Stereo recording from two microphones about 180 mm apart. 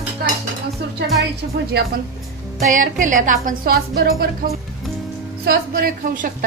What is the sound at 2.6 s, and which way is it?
A woman's voice, 45° right (ahead or behind).